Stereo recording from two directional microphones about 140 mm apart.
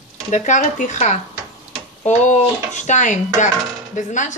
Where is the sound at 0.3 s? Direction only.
60° left (ahead or behind).